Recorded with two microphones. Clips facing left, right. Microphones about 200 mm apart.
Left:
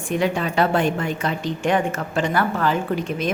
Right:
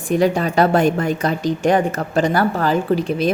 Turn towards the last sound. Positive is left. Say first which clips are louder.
# right 6 dB
turn(degrees=-35)  # may be behind; listen again after turning